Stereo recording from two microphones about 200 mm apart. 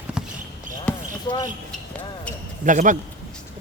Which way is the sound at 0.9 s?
5° left (ahead or behind).